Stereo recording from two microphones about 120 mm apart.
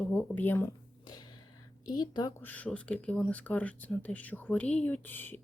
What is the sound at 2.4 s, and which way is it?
Speech, 10° left (ahead or behind).